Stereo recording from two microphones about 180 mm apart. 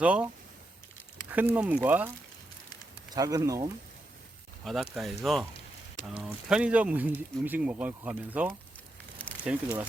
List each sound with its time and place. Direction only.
0.0 s speech: 5° right (ahead or behind)
1.3 s speech: 10° right (ahead or behind)
3.1 s speech: 20° right (ahead or behind)
4.6 s speech: centre (ahead or behind)
9.2 s a sound: 10° left (ahead or behind)